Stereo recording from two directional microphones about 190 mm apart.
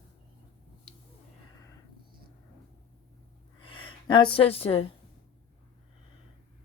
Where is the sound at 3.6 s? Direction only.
25° left (ahead or behind).